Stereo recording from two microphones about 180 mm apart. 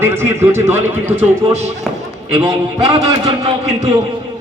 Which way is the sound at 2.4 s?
15° right (ahead or behind).